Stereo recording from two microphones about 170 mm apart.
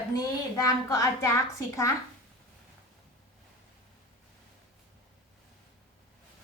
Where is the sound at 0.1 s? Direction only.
20° left (ahead or behind).